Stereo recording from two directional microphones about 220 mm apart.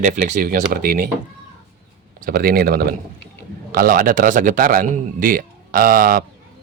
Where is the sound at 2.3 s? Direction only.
45° right (ahead or behind).